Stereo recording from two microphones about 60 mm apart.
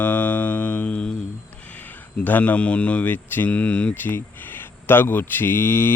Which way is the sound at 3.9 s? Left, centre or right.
Left.